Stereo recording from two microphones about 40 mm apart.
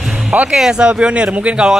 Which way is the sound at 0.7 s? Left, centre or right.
Right.